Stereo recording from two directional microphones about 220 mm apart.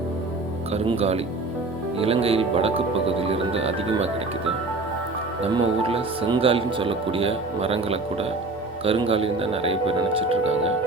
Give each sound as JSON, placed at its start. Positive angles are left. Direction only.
{"t": 0.7, "sound": "speech", "side_deg": -30}
{"t": 5.4, "sound": "speech", "side_deg": -25}